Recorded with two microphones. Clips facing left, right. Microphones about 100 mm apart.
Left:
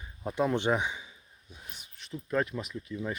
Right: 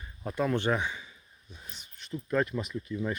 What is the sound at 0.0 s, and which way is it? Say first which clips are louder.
Speech: left 1 dB; 10° left (ahead or behind).